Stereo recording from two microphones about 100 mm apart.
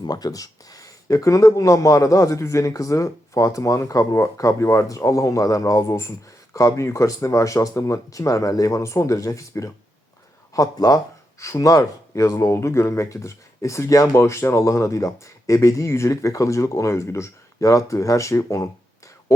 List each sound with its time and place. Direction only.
0.0 s speech: 40° left (ahead or behind)